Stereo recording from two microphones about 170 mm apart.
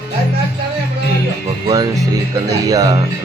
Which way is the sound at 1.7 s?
20° right (ahead or behind).